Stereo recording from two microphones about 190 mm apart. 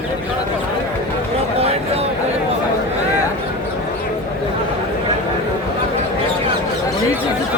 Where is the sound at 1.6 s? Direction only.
30° right (ahead or behind).